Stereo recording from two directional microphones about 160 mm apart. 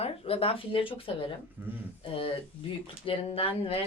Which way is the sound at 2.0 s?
35° left (ahead or behind).